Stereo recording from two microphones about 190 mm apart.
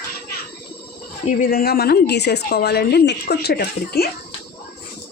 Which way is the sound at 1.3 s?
45° left (ahead or behind).